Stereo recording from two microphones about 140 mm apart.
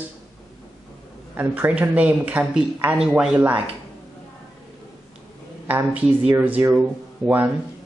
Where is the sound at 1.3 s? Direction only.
15° right (ahead or behind).